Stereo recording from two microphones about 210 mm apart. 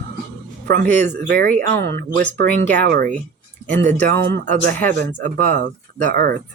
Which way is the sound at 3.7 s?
10° left (ahead or behind).